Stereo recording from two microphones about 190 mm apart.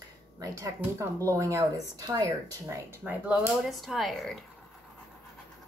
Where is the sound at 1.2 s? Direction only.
15° right (ahead or behind); by 4.4 s centre (ahead or behind).